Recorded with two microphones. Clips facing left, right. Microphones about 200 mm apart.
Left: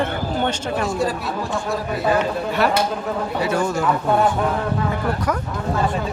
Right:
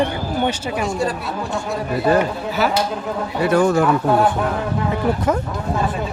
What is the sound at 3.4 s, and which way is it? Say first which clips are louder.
Speech: right 7 dB; 55° right (ahead or behind).